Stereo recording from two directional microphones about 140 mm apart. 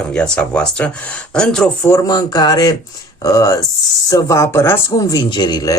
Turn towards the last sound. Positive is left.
turn(degrees=30)  # may be behind; listen again after turning